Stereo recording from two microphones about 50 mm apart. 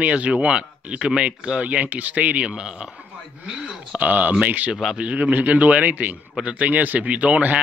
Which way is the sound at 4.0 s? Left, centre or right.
Right.